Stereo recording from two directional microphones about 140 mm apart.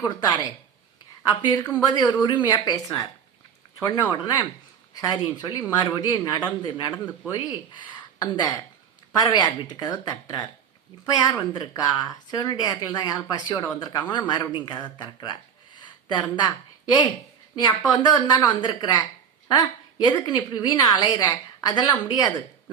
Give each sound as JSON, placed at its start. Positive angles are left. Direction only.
{"t": 0.0, "sound": "a woman's voice", "side_deg": 30}
{"t": 8.2, "sound": "a woman's voice", "side_deg": 30}